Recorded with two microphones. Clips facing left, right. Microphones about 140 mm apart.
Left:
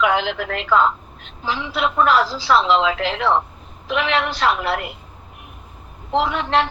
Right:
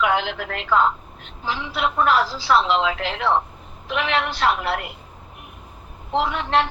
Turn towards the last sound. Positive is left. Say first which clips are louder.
# left 2 dB
turn(degrees=90)